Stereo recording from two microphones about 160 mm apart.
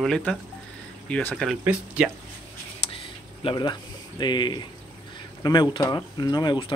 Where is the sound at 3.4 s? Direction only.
25° left (ahead or behind).